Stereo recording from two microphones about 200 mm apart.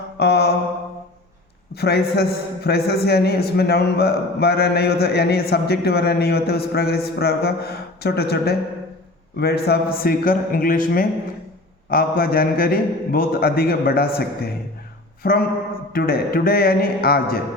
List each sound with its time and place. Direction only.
0.2 s mantra: 55° left (ahead or behind)
1.7 s a man's voice: 55° left (ahead or behind)